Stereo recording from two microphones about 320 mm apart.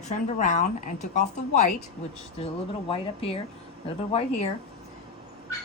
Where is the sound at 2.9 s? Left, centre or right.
Centre.